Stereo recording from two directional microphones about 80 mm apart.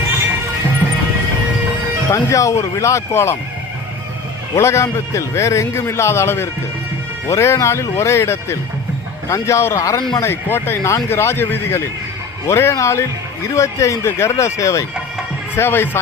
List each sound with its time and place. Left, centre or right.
2.0 s a man's voice: left
4.5 s a man's voice: left
15.5 s speech: left